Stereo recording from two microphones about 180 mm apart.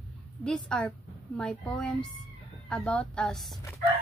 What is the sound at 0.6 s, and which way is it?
A woman's voice, 5° left (ahead or behind).